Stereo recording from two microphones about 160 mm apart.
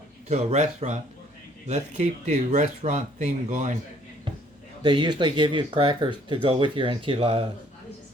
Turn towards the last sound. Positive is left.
turn(degrees=-40)  # may be behind; listen again after turning